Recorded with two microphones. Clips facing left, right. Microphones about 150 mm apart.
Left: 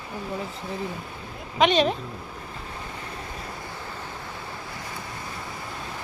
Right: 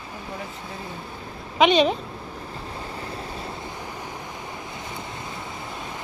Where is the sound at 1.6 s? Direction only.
Centre (ahead or behind).